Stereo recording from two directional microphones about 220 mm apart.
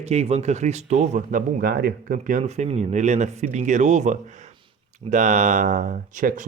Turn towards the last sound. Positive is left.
turn(degrees=-35)  # may be behind; listen again after turning